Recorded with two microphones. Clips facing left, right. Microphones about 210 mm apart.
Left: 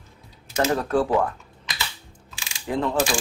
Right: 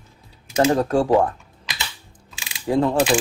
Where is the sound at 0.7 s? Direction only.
30° right (ahead or behind).